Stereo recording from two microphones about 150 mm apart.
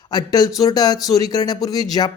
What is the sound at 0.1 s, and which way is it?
Speech, 25° left (ahead or behind).